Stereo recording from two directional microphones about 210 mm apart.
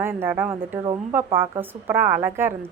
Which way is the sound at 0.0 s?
10° right (ahead or behind).